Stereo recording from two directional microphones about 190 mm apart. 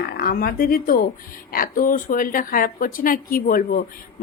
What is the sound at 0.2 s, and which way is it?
A woman's voice, 55° left (ahead or behind).